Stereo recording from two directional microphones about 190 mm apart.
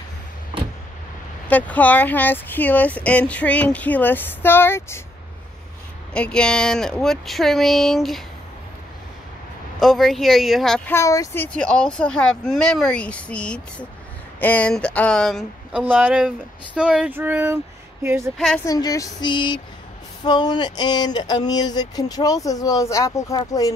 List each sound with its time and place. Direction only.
1.5 s speech: 10° left (ahead or behind)
6.1 s speech: 5° left (ahead or behind)
9.8 s speech: centre (ahead or behind)
10.9 s speech: 15° left (ahead or behind); by 18.3 s 15° right (ahead or behind)
18.7 s a sound: 20° left (ahead or behind)